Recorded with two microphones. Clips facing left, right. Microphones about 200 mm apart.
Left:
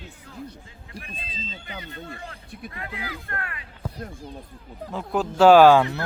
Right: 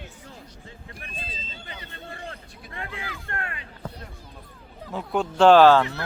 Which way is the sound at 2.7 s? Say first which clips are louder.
Right 1 dB; 30° right (ahead or behind).